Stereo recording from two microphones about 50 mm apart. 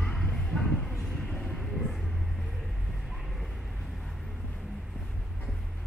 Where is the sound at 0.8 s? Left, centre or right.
Centre.